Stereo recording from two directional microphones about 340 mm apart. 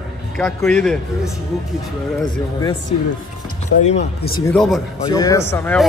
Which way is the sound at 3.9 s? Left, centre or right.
Left.